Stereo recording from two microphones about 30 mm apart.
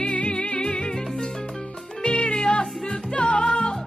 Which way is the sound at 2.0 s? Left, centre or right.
Left.